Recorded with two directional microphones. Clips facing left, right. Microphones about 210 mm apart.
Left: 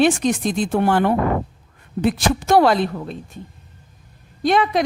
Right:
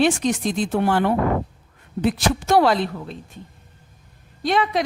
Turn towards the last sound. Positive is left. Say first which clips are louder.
# left 3 dB
turn(degrees=50)  # may be behind; listen again after turning